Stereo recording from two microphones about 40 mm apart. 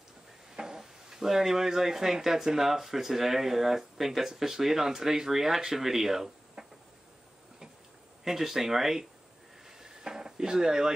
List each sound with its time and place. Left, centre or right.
0.6 s speech: centre
8.2 s speech: centre
9.7 s a sound: centre